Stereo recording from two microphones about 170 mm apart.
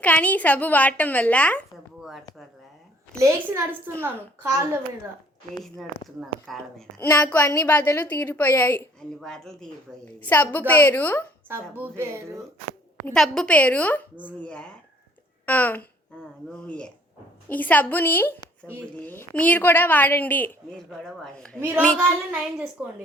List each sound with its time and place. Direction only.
0.0 s a woman's voice: 10° left (ahead or behind)
2.0 s a sound: centre (ahead or behind)
3.2 s speech: 15° right (ahead or behind)
5.6 s a woman's voice: centre (ahead or behind)
11.4 s speech: 15° right (ahead or behind)
13.1 s a woman's voice: 5° left (ahead or behind)
22.5 s speech: 5° right (ahead or behind)